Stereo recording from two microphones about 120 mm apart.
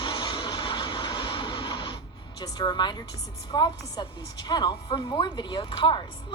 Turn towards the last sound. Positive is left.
turn(degrees=40)  # may be behind; listen again after turning